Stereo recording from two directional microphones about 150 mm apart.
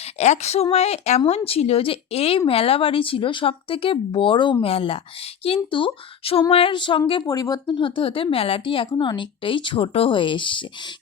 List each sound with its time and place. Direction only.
0.2 s speech: 45° left (ahead or behind)